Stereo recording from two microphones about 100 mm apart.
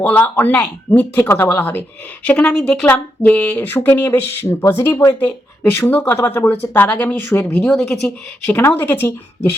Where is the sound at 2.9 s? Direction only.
20° left (ahead or behind).